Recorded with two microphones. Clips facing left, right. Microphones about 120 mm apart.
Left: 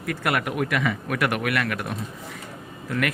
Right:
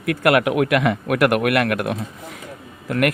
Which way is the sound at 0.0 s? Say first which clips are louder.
Right 8 dB; 75° right (ahead or behind).